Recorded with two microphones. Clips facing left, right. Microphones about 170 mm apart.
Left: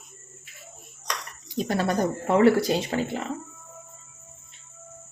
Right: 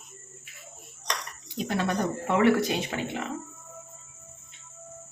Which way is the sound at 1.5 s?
40° left (ahead or behind).